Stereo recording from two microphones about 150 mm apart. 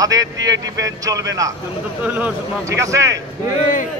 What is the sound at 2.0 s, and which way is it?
Speech, 10° right (ahead or behind).